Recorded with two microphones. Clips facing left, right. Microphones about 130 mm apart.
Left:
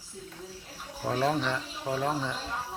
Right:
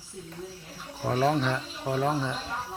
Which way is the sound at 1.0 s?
5° right (ahead or behind).